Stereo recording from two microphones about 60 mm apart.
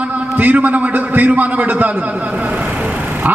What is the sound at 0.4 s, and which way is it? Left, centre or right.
A man's voice, right.